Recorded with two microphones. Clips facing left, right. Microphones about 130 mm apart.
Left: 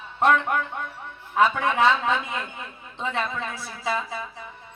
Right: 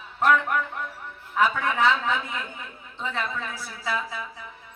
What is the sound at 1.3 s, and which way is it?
Speech, 20° left (ahead or behind).